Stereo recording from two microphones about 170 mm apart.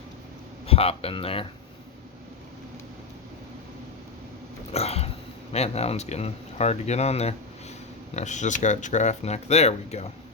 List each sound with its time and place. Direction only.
0.7 s speech: 35° left (ahead or behind)
4.7 s speech: 35° left (ahead or behind)